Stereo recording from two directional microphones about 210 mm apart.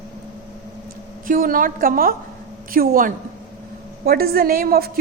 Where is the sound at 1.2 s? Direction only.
40° right (ahead or behind).